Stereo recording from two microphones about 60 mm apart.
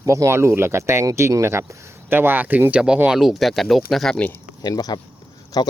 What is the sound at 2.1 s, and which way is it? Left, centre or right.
Speech, right.